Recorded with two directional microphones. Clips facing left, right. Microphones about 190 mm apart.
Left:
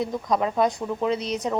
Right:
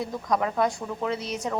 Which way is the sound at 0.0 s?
20° left (ahead or behind).